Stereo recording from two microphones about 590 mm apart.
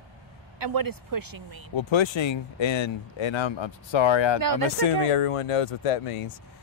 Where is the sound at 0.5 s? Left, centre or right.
Right.